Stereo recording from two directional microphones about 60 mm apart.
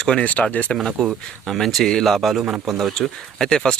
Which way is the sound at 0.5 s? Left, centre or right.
Left.